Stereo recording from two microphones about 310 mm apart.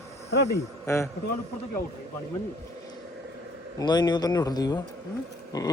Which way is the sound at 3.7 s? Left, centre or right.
Centre.